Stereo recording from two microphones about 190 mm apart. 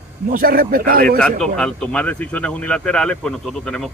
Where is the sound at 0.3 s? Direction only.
50° right (ahead or behind).